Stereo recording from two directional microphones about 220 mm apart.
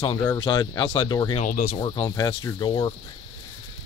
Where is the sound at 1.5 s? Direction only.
40° left (ahead or behind).